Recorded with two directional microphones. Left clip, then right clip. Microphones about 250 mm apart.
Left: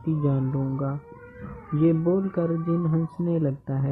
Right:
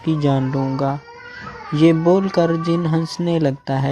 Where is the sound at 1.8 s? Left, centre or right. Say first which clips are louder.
Right 9 dB; right.